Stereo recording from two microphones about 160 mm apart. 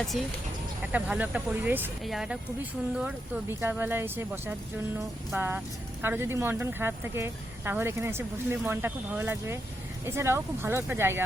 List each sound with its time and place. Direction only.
0.0 s speech: centre (ahead or behind)
3.5 s speech: 15° right (ahead or behind)